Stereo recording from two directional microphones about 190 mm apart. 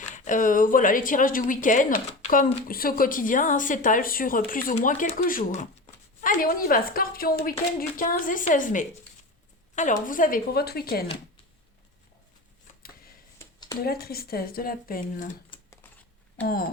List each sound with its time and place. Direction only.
0.3 s speech: 45° left (ahead or behind)
13.4 s a sound: 15° left (ahead or behind)
13.8 s speech: 55° left (ahead or behind)
15.5 s typing: 25° left (ahead or behind)
16.4 s speech: 10° left (ahead or behind)